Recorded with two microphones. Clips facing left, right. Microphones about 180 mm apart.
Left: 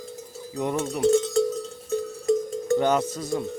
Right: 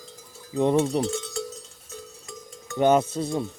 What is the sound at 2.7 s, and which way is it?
Speech, 20° right (ahead or behind).